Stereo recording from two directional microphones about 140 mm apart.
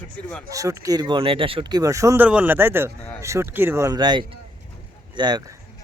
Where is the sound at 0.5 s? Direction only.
25° right (ahead or behind); by 1.8 s 40° right (ahead or behind).